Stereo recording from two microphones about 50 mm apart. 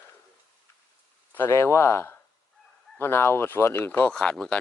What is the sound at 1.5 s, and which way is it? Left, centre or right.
Speech, left.